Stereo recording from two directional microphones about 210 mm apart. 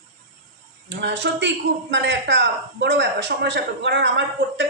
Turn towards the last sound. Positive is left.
turn(degrees=-60)  # may be behind; listen again after turning